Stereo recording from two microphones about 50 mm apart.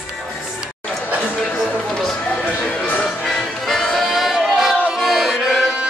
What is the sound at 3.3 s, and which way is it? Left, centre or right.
Music, centre.